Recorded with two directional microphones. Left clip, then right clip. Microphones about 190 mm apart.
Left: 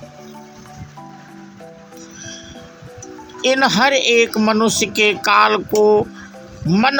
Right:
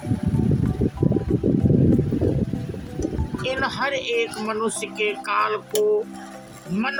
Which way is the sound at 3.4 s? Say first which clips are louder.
Left 10 dB; 40° left (ahead or behind).